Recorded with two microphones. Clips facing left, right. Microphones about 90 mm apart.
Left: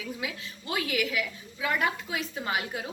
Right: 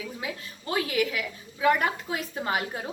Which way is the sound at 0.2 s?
35° right (ahead or behind).